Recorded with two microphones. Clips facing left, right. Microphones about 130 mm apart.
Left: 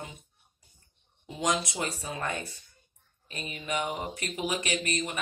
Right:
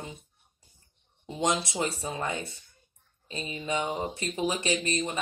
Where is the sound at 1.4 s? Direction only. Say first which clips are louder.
Right 2 dB; 30° right (ahead or behind).